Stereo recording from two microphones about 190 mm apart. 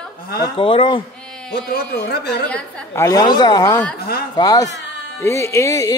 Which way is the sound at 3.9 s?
55° left (ahead or behind).